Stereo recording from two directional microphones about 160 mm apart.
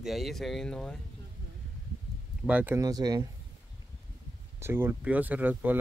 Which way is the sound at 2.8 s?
25° right (ahead or behind).